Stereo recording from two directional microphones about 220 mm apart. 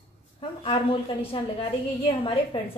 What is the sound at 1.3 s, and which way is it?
A woman's voice, 25° left (ahead or behind).